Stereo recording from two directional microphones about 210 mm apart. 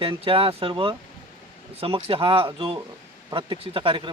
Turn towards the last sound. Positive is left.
turn(degrees=-25)  # may be behind; listen again after turning